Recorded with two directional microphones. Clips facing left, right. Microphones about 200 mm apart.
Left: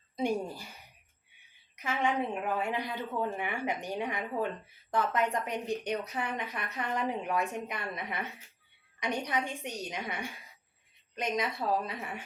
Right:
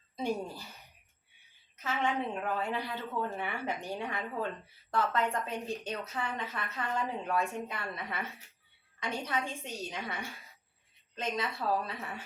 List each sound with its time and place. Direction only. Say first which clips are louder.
0.2 s a woman's voice: left 3 dB; 15° left (ahead or behind)
1.7 s a woman's voice: left 2 dB; 15° left (ahead or behind)